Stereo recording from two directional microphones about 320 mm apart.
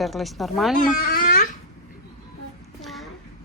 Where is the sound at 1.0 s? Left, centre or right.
Left.